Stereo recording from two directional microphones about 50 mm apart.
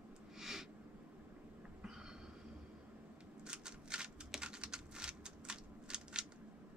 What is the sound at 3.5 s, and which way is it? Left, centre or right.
Shuffling cards, centre.